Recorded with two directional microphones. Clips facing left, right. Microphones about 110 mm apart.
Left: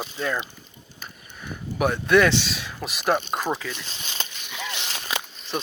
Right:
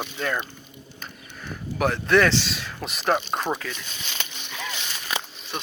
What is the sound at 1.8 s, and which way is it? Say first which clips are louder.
Speech: left 1 dB; 15° left (ahead or behind).